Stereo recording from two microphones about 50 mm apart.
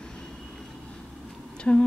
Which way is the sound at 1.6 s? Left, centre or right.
Left.